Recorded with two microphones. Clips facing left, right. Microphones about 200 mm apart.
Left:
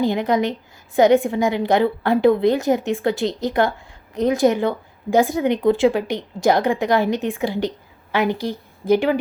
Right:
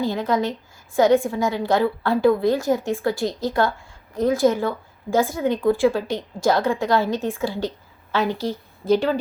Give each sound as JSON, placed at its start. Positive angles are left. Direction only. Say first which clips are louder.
{"t": 0.0, "sound": "a woman's voice", "louder": "left 3 dB", "side_deg": 15}